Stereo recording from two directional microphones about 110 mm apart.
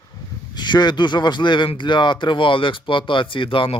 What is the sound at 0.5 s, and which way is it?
Speech, 40° left (ahead or behind).